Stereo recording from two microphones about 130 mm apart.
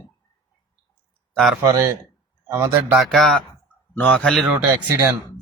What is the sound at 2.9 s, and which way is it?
Speech, centre (ahead or behind).